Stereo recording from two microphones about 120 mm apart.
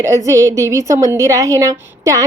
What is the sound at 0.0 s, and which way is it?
A woman's voice, 25° right (ahead or behind).